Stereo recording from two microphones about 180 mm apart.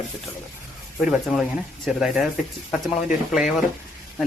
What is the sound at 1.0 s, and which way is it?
Speech, centre (ahead or behind).